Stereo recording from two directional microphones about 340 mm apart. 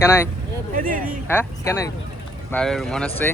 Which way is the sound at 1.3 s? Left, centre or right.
Centre.